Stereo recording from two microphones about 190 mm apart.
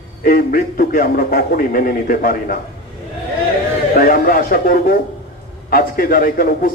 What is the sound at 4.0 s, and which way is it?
A man's voice, 50° left (ahead or behind).